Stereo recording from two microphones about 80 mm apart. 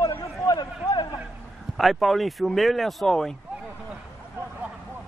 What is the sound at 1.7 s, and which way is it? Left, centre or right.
Speech, centre.